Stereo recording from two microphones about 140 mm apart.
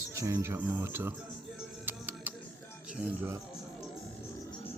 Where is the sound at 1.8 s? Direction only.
10° right (ahead or behind).